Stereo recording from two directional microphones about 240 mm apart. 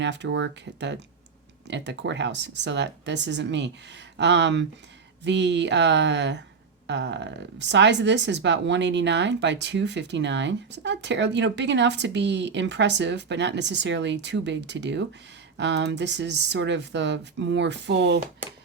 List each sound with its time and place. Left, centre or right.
0.0 s speech: right